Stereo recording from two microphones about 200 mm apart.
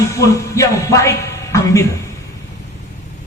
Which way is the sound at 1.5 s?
15° left (ahead or behind).